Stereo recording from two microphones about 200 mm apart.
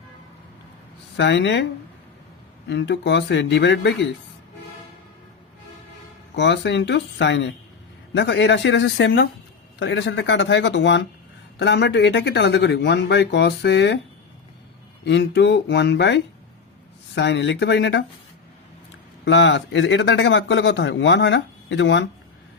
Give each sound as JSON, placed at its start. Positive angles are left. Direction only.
{"t": 1.1, "sound": "a man's voice", "side_deg": 65}
{"t": 2.6, "sound": "a man's voice", "side_deg": 60}
{"t": 6.3, "sound": "a man's voice", "side_deg": 60}
{"t": 15.0, "sound": "a man's voice", "side_deg": 60}
{"t": 19.2, "sound": "a man's voice", "side_deg": 65}